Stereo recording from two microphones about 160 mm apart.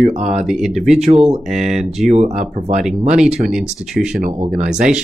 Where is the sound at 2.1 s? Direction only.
45° right (ahead or behind).